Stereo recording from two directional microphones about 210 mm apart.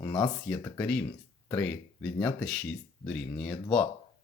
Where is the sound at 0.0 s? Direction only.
15° left (ahead or behind).